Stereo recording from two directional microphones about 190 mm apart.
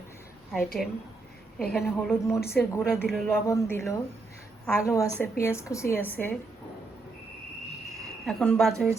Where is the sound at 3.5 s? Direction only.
15° left (ahead or behind).